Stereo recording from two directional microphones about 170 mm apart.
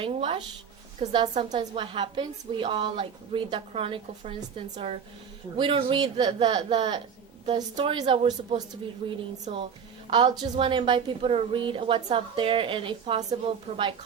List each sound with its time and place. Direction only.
0.0 s a woman's voice: 30° right (ahead or behind)
1.3 s a woman's voice: 45° right (ahead or behind)
1.5 s a woman's voice: 30° right (ahead or behind)